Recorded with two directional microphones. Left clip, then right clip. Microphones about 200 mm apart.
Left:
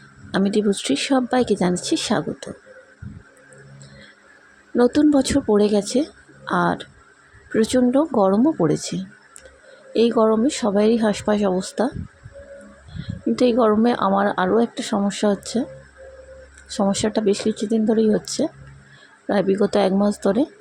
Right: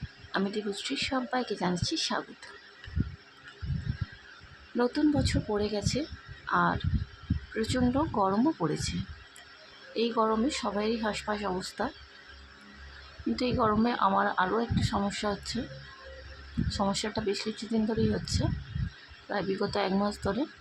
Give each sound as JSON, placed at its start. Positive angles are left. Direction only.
{"t": 0.3, "sound": "speech", "side_deg": 45}
{"t": 4.8, "sound": "speech", "side_deg": 40}
{"t": 13.3, "sound": "speech", "side_deg": 40}
{"t": 16.9, "sound": "speech", "side_deg": 40}